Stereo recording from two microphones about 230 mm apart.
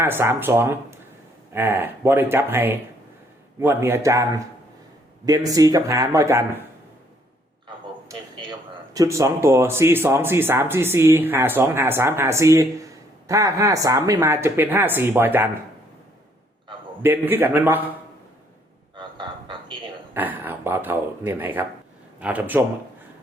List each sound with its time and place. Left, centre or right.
0.0 s speech: centre
8.0 s speech: centre
17.0 s speech: centre
18.9 s a sound: right
20.1 s speech: centre